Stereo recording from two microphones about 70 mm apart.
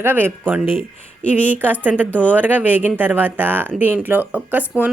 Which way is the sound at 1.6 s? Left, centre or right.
Right.